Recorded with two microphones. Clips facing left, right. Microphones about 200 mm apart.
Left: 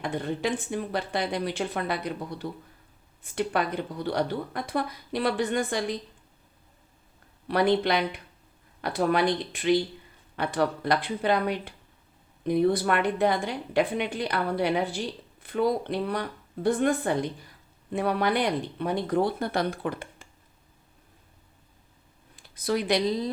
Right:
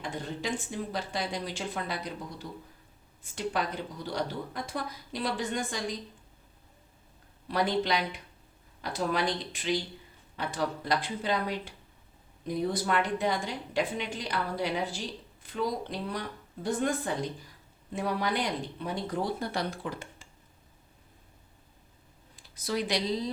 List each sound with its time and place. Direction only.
0.0 s a woman's voice: 60° left (ahead or behind)
7.4 s a woman's voice: 60° left (ahead or behind)
22.5 s a woman's voice: 60° left (ahead or behind)